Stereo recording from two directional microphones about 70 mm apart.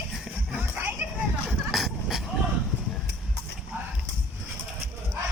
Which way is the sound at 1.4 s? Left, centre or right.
Centre.